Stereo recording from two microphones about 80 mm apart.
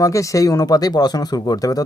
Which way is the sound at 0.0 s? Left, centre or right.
Left.